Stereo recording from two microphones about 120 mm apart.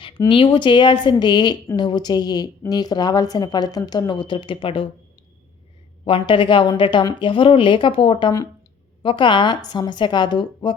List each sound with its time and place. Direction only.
0.3 s a woman's voice: 45° left (ahead or behind)
6.1 s a woman's voice: 50° left (ahead or behind)